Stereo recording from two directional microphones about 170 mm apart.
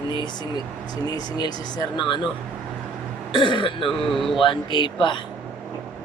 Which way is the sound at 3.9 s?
Centre (ahead or behind).